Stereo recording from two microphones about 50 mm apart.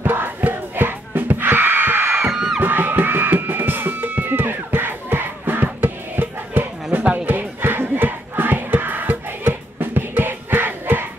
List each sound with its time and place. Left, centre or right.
0.0 s music: right